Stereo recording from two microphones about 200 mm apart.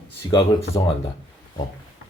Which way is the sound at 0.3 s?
25° left (ahead or behind).